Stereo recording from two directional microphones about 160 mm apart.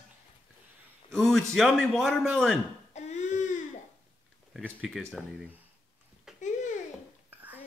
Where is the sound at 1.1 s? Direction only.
Centre (ahead or behind).